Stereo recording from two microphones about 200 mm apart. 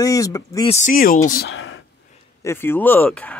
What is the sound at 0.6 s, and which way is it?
Speech, 35° left (ahead or behind).